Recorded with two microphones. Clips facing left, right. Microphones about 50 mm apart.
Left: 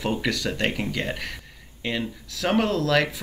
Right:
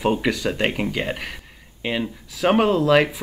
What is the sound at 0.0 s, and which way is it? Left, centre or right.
Speech, right.